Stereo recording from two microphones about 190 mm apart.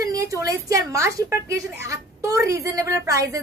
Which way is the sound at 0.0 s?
15° right (ahead or behind).